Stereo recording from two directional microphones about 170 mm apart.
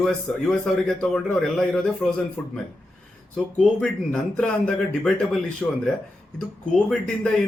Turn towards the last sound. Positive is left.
turn(degrees=5)  # may be behind; listen again after turning